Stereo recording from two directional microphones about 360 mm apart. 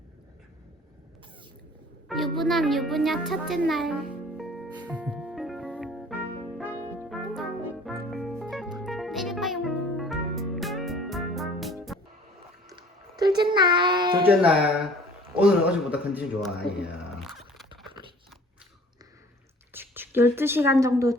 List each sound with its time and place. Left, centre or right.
2.0 s a woman's voice: centre
4.7 s music: centre
6.7 s brass instrument: centre
8.1 s music: centre
12.6 s a sound: centre
15.4 s a man's voice: centre
16.5 s speech: left
17.2 s biting: centre
19.7 s a woman's voice: centre